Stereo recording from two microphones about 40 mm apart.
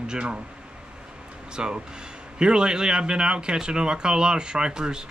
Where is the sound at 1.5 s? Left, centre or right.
Right.